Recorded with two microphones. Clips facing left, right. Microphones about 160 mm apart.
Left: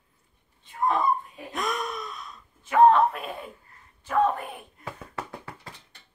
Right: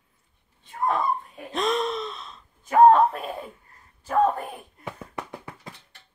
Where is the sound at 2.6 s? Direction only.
40° right (ahead or behind).